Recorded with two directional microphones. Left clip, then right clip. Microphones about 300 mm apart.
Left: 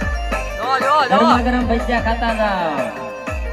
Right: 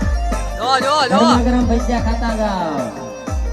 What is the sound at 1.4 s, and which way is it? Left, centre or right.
Speech, left.